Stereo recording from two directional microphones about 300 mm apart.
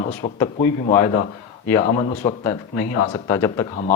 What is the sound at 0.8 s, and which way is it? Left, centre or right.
Speech, left.